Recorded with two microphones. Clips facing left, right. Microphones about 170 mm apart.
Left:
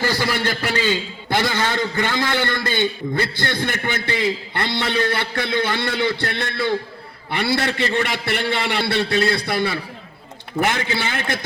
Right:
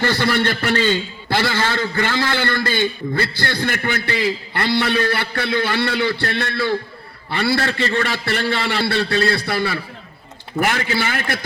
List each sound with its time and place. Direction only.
0.0 s a man's voice: 10° left (ahead or behind)